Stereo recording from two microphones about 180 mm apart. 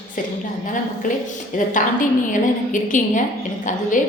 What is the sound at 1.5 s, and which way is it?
A woman's voice, 45° left (ahead or behind).